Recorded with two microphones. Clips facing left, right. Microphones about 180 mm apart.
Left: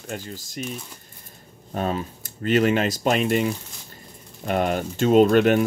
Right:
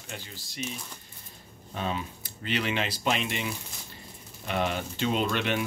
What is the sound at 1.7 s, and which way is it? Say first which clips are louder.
Speech: left 6 dB; 45° left (ahead or behind).